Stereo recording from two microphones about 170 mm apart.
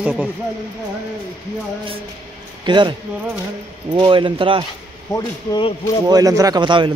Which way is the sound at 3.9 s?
30° right (ahead or behind).